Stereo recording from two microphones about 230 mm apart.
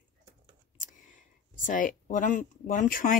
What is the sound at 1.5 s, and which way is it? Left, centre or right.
Speech, left.